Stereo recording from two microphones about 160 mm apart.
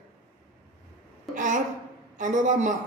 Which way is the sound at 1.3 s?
55° right (ahead or behind).